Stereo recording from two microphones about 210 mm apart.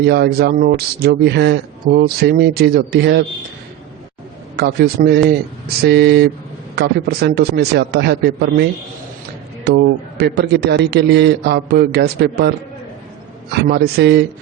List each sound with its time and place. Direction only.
0.0 s a man's voice: 50° right (ahead or behind)
4.5 s a man's voice: 50° right (ahead or behind)
9.6 s a man's voice: 50° right (ahead or behind)
13.6 s a man's voice: 50° right (ahead or behind)